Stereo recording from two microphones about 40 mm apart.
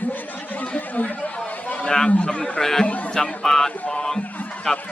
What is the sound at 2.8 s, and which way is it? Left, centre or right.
Speech, left.